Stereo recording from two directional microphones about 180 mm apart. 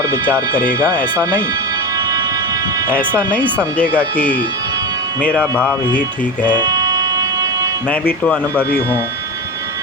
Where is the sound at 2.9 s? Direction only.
10° left (ahead or behind).